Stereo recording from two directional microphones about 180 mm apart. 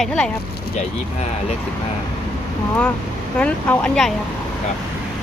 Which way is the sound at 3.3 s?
5° left (ahead or behind).